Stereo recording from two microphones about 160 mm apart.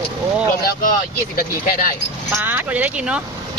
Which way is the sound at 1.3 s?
65° left (ahead or behind).